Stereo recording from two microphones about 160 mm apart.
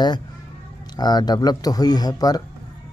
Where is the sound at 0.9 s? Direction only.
25° left (ahead or behind).